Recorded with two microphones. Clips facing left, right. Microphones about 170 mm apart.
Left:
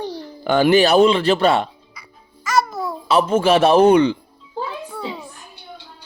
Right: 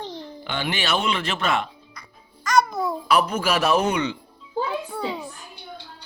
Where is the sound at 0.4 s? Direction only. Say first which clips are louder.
Left 14 dB; 45° left (ahead or behind).